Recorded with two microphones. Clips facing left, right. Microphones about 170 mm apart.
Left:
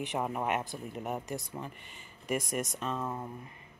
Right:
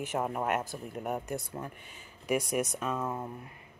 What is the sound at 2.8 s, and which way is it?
Speech, 5° right (ahead or behind).